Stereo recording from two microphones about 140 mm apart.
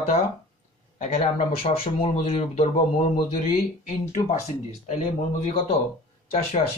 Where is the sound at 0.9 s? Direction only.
50° left (ahead or behind).